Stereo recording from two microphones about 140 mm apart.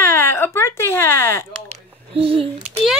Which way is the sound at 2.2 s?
40° right (ahead or behind).